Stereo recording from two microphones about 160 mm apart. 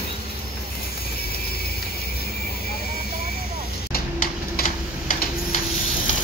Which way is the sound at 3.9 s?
65° left (ahead or behind).